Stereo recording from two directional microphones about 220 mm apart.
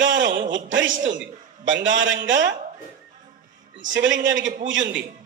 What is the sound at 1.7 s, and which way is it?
Speech, 55° right (ahead or behind).